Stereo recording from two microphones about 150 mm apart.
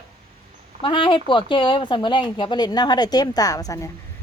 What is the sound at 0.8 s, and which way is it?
Speech, 30° left (ahead or behind).